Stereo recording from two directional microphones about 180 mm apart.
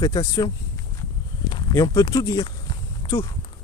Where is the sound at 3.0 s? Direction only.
20° left (ahead or behind).